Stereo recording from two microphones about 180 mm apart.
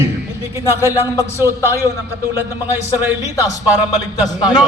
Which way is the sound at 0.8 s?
15° right (ahead or behind).